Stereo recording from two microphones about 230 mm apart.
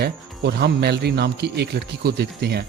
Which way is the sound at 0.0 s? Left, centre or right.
Right.